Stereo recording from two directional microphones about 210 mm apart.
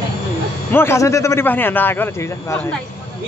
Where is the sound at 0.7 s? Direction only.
10° left (ahead or behind).